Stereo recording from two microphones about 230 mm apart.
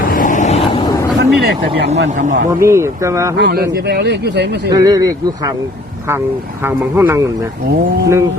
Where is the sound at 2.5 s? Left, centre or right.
Centre.